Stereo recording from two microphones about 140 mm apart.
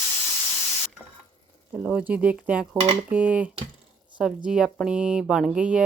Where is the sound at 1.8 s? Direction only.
10° right (ahead or behind).